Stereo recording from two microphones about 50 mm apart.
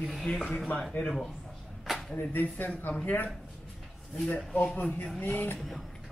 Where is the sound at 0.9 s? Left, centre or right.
Left.